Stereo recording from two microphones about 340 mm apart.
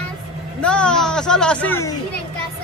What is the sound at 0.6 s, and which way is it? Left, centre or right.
Speech, centre.